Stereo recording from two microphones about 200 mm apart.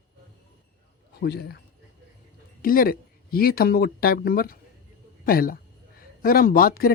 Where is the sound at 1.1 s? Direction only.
55° left (ahead or behind).